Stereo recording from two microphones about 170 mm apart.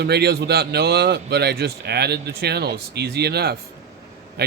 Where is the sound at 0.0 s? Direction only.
75° right (ahead or behind).